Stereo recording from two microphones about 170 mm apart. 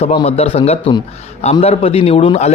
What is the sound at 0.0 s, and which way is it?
A man's voice, 35° left (ahead or behind).